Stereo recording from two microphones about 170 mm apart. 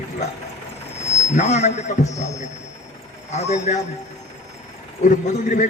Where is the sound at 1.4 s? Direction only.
45° left (ahead or behind).